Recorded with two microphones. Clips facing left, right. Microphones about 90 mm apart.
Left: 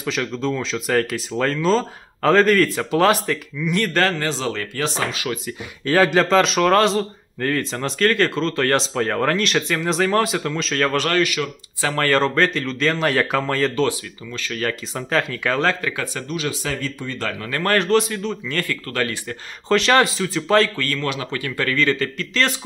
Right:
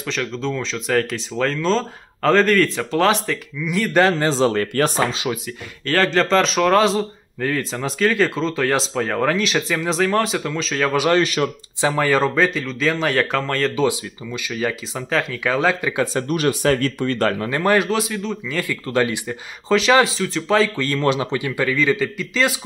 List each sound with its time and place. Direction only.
0.0 s a man's voice: 5° left (ahead or behind)
4.3 s speech: 35° right (ahead or behind)
4.6 s speech: 50° right (ahead or behind)
5.9 s a man's voice: 10° left (ahead or behind); by 11.1 s 10° right (ahead or behind)
11.1 s speech: 30° right (ahead or behind)
11.8 s a man's voice: 10° right (ahead or behind)
13.8 s speech: 15° right (ahead or behind)
16.0 s speech: 30° right (ahead or behind)
16.3 s speech: 50° right (ahead or behind)
17.4 s a man's voice: 20° right (ahead or behind)
18.9 s speech: 20° right (ahead or behind)
19.7 s a man's voice: centre (ahead or behind)
20.7 s speech: 25° right (ahead or behind); by 22.6 s 10° right (ahead or behind)